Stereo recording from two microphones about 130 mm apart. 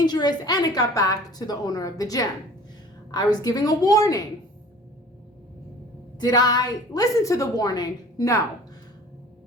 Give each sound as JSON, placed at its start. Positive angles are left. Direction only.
{"t": 0.0, "sound": "a woman's voice", "side_deg": 35}
{"t": 6.1, "sound": "a woman's voice", "side_deg": 30}